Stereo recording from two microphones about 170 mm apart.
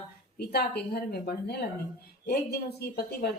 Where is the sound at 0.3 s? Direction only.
70° left (ahead or behind).